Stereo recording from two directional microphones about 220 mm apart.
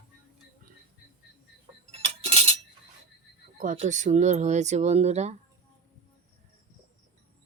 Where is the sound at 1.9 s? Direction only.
25° right (ahead or behind).